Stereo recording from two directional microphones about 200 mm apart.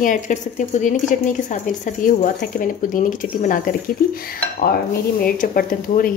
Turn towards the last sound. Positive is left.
turn(degrees=45)  # may be behind; listen again after turning